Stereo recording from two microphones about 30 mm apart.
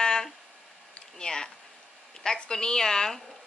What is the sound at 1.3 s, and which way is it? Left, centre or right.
A woman's voice, left.